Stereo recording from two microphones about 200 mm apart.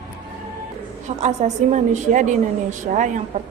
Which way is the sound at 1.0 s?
35° right (ahead or behind).